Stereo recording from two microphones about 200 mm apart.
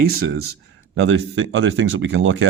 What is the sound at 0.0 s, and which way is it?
Speech, 50° right (ahead or behind).